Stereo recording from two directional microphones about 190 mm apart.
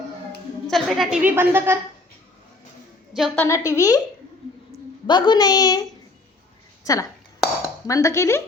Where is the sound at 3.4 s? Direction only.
15° left (ahead or behind).